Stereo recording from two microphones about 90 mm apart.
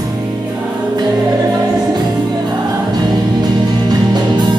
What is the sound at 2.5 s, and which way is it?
Music, 50° right (ahead or behind).